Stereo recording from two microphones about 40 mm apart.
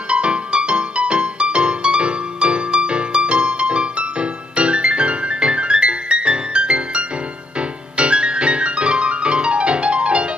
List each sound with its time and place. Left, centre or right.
0.1 s music: right
8.0 s piano: right